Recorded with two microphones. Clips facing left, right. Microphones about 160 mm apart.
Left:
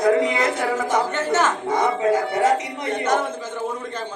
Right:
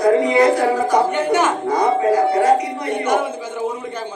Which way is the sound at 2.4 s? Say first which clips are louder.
Right 4 dB; 20° left (ahead or behind).